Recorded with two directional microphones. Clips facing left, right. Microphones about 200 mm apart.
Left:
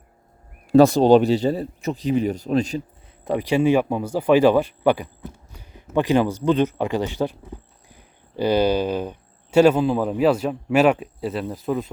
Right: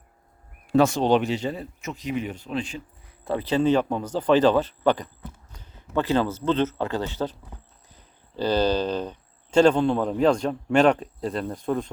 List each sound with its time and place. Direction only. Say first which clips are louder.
0.7 s speech: left 6 dB; 35° left (ahead or behind)
3.2 s speech: left 3 dB; 15° left (ahead or behind)